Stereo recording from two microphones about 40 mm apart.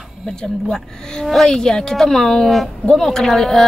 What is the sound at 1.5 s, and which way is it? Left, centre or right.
Speech, centre.